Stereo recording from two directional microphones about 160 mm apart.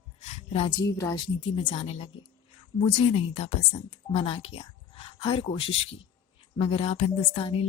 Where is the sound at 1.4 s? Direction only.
35° left (ahead or behind).